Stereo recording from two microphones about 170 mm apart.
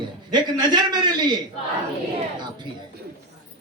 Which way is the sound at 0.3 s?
25° right (ahead or behind).